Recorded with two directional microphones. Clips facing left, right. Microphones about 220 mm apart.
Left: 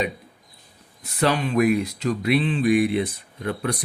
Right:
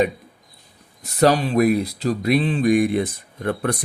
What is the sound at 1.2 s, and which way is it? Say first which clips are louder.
Speech: right 4 dB; 35° right (ahead or behind).